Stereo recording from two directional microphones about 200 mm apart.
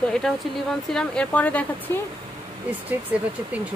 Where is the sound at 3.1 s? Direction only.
5° right (ahead or behind).